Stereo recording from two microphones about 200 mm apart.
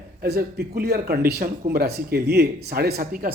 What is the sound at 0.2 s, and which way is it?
A man's voice, 50° right (ahead or behind).